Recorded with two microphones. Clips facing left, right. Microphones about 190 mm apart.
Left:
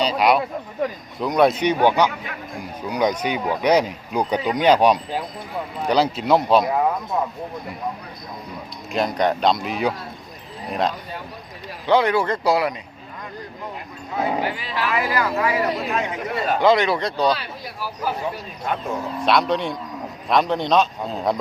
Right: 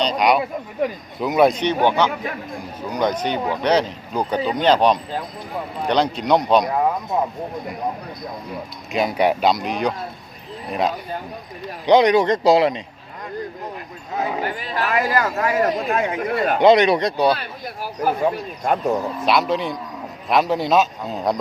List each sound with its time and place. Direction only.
0.0 s speech: 5° left (ahead or behind)
1.5 s speech: 10° left (ahead or behind)
8.9 s speech: 5° right (ahead or behind)
11.9 s speech: 20° right (ahead or behind)
14.4 s speech: 45° right (ahead or behind)
16.6 s speech: 20° right (ahead or behind)
17.3 s speech: 50° right (ahead or behind)
19.2 s speech: centre (ahead or behind)